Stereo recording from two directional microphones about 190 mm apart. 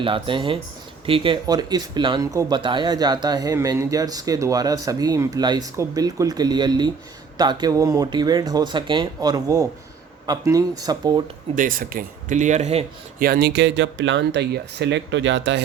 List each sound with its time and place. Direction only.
0.0 s speech: 25° right (ahead or behind)
11.5 s speech: 45° right (ahead or behind)
13.2 s speech: 55° right (ahead or behind); by 15.6 s 75° right (ahead or behind)